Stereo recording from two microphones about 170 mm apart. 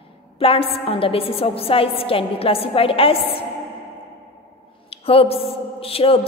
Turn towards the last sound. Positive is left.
turn(degrees=35)  # may be behind; listen again after turning